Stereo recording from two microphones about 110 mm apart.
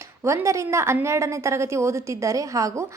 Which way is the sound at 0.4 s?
25° right (ahead or behind).